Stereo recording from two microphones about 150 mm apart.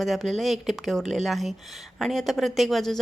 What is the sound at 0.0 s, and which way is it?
A woman's voice, centre (ahead or behind).